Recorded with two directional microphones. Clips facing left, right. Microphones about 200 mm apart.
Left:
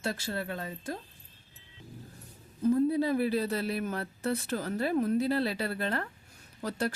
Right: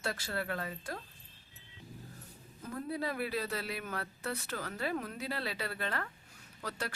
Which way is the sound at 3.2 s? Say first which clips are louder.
Left 7 dB; 40° left (ahead or behind).